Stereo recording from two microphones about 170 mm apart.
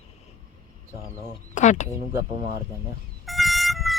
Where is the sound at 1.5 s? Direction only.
45° left (ahead or behind).